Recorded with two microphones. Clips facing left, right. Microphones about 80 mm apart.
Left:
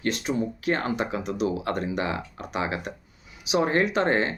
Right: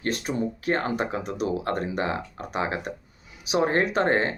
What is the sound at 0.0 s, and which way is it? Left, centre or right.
Speech, right.